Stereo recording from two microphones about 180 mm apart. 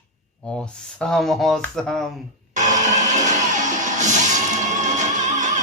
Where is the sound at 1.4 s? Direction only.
Centre (ahead or behind).